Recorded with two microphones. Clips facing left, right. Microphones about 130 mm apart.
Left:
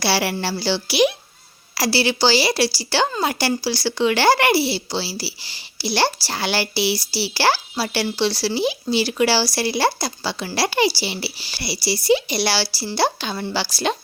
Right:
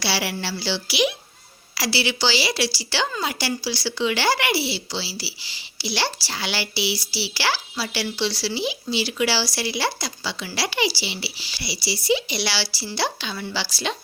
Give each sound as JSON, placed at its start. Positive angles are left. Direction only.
{"t": 0.0, "sound": "speech", "side_deg": 50}